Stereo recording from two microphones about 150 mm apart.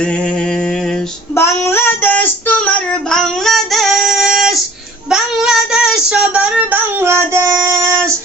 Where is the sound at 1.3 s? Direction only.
15° left (ahead or behind); by 8.1 s 20° right (ahead or behind).